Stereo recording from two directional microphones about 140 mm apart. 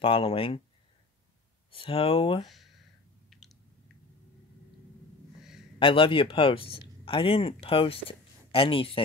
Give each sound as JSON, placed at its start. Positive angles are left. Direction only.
{"t": 0.0, "sound": "speech", "side_deg": 40}
{"t": 1.7, "sound": "speech", "side_deg": 40}
{"t": 2.4, "sound": "a sound", "side_deg": 0}
{"t": 3.3, "sound": "squish", "side_deg": 0}
{"t": 5.8, "sound": "speech", "side_deg": 40}